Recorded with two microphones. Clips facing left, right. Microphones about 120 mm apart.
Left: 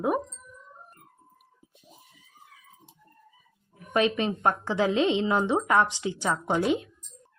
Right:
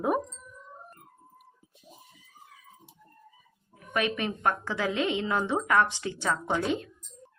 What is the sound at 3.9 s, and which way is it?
A woman's voice, 25° left (ahead or behind).